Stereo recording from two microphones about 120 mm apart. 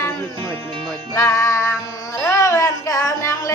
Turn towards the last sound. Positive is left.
turn(degrees=30)  # may be behind; listen again after turning